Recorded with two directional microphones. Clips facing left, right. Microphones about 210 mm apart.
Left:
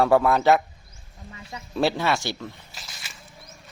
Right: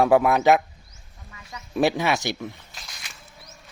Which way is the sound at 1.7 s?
15° right (ahead or behind).